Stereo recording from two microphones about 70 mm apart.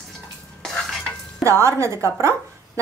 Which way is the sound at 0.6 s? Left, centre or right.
Centre.